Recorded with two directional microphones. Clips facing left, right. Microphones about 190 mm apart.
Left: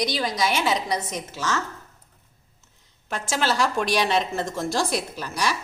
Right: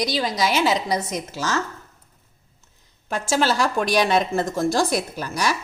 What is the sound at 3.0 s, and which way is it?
Speech, 35° right (ahead or behind).